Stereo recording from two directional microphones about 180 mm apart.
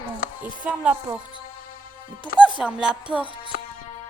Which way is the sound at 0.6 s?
5° right (ahead or behind).